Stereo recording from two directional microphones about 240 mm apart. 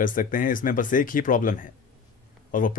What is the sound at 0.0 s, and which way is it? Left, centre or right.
Speech, left.